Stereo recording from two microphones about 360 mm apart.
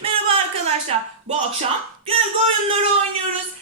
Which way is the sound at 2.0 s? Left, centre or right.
Centre.